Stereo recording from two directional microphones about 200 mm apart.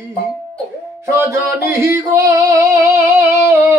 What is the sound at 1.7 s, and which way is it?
Singing, 15° right (ahead or behind).